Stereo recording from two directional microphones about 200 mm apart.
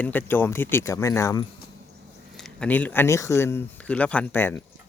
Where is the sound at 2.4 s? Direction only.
5° left (ahead or behind).